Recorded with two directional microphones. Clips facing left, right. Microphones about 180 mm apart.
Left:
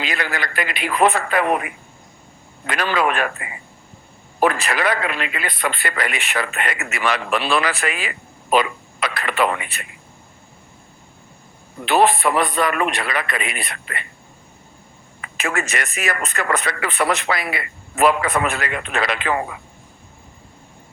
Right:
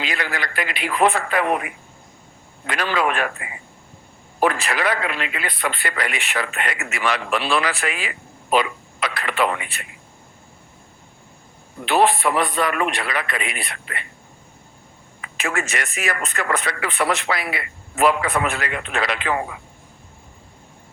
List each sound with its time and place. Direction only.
0.0 s a man's voice: 50° left (ahead or behind)
11.9 s a man's voice: 45° left (ahead or behind)
15.2 s a man's voice: 60° left (ahead or behind)